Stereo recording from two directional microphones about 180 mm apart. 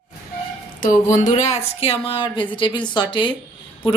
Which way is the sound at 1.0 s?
40° left (ahead or behind).